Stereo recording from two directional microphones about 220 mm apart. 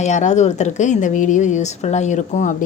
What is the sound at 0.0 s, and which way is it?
Speech, 30° left (ahead or behind).